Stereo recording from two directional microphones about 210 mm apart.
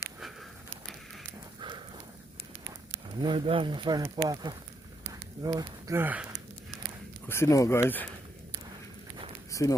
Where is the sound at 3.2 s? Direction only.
25° right (ahead or behind); by 6.3 s 10° right (ahead or behind).